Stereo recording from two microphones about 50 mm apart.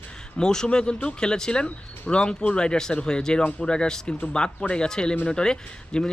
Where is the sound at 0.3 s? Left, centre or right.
Centre.